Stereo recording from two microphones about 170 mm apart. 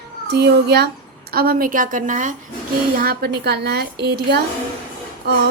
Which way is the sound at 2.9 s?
65° right (ahead or behind).